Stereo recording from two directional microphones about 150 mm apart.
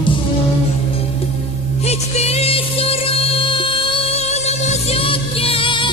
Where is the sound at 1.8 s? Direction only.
45° left (ahead or behind).